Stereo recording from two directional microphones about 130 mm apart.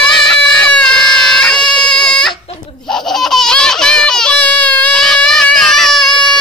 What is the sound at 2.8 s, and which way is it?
Baby laughter, 5° left (ahead or behind).